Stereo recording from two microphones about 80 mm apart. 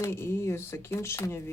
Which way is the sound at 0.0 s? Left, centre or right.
Left.